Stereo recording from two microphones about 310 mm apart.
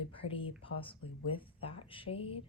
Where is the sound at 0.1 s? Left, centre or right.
Centre.